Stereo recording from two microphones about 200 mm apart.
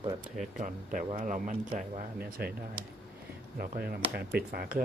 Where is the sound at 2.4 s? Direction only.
50° right (ahead or behind).